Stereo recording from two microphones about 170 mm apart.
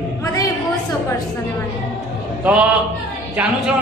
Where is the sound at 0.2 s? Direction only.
20° left (ahead or behind).